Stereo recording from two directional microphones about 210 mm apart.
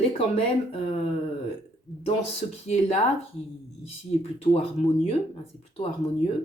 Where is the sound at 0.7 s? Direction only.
30° left (ahead or behind).